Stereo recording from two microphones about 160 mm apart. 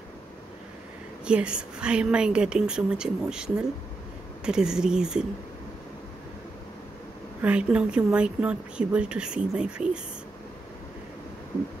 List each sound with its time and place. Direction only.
1.2 s a woman's voice: 5° right (ahead or behind)
7.4 s speech: 5° right (ahead or behind)